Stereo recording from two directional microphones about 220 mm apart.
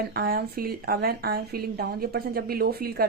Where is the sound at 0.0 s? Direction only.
45° right (ahead or behind).